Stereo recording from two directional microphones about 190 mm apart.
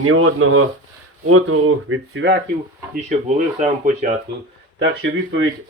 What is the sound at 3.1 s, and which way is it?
Speech, 35° right (ahead or behind).